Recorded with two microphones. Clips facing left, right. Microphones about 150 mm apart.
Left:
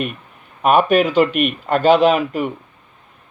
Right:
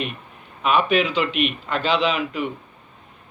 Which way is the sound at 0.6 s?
50° left (ahead or behind).